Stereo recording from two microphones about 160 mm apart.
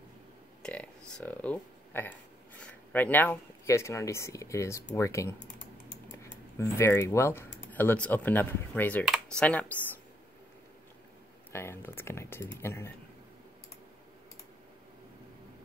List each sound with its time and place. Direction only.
0.6 s speech: 5° left (ahead or behind)
11.5 s speech: 15° left (ahead or behind)